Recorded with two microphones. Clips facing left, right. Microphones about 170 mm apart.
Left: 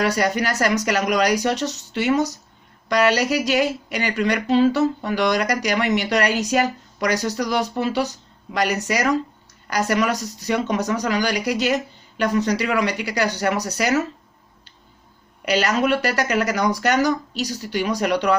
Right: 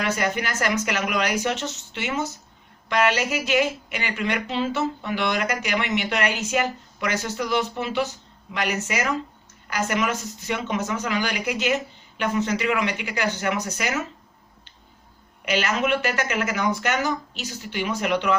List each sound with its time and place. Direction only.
0.0 s speech: 40° left (ahead or behind)
15.4 s speech: 40° left (ahead or behind)